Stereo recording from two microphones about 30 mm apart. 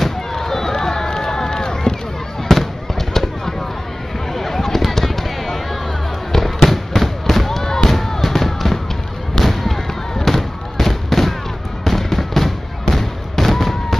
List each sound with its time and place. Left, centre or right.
0.3 s run: centre
2.4 s fireworks: centre